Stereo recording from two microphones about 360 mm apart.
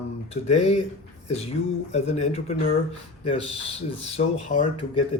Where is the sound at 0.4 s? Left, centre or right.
Centre.